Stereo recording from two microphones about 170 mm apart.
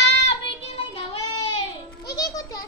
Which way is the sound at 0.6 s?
35° left (ahead or behind).